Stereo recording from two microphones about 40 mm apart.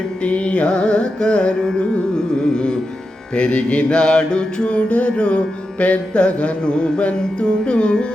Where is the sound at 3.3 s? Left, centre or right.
Left.